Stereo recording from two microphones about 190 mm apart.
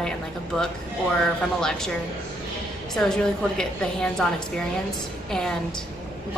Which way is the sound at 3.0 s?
5° left (ahead or behind).